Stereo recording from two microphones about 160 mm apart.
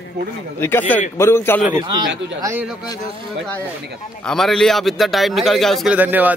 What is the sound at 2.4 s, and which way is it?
Speech, 15° right (ahead or behind).